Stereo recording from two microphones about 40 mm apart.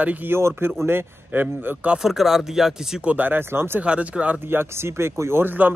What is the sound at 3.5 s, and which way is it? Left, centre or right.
Speech, right.